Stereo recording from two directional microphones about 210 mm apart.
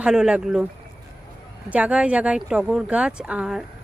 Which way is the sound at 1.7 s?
5° right (ahead or behind).